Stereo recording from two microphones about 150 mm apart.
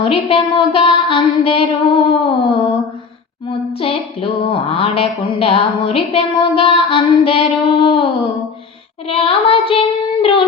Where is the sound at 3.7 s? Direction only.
40° left (ahead or behind).